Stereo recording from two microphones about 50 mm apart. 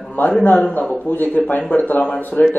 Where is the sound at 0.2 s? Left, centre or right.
Left.